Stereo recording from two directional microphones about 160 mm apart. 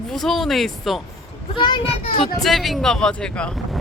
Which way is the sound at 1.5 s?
30° left (ahead or behind).